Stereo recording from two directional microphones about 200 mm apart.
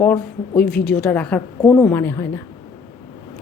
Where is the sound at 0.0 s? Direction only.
10° left (ahead or behind).